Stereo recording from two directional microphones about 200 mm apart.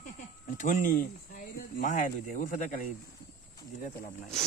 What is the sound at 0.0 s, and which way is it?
Speech, 40° left (ahead or behind).